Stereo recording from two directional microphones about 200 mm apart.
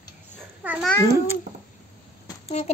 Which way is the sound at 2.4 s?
35° left (ahead or behind).